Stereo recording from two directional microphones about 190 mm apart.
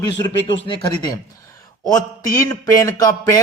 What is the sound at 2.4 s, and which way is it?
Speech, 20° left (ahead or behind).